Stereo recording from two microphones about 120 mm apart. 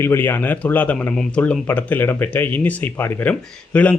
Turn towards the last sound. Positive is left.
turn(degrees=10)  # may be behind; listen again after turning